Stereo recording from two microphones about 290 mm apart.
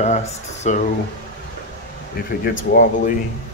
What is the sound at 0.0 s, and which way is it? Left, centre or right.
Speech, left.